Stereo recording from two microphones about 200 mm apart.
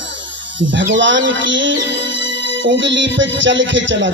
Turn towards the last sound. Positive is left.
turn(degrees=-65)  # may be behind; listen again after turning